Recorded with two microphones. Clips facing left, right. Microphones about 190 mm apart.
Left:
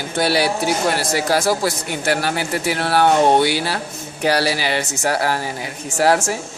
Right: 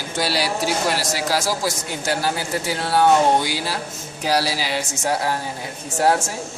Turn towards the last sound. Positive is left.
turn(degrees=85)